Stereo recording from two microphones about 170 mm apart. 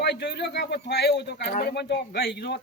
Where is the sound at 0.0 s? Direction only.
80° left.